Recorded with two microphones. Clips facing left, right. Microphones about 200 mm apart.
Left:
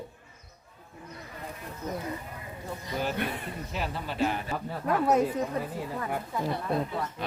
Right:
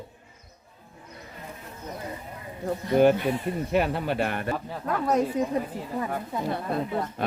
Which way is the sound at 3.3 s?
60° right (ahead or behind).